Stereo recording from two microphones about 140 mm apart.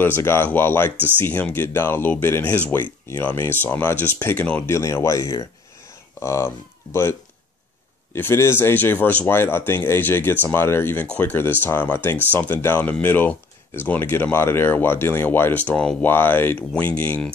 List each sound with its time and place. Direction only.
0.0 s speech: 15° left (ahead or behind)